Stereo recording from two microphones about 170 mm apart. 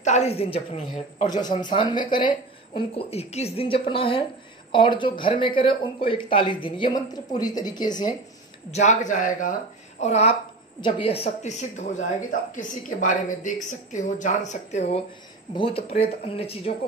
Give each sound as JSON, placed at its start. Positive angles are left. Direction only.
{"t": 0.0, "sound": "speech", "side_deg": 40}
{"t": 8.7, "sound": "speech", "side_deg": 45}